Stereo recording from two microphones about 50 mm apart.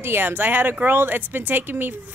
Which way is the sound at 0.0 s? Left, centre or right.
Right.